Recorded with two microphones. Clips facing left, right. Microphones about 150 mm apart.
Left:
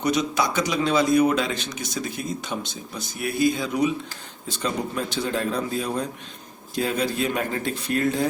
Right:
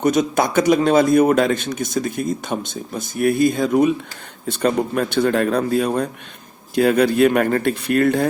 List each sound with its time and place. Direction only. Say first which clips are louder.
0.0 s a man's voice: right 6 dB; 50° right (ahead or behind)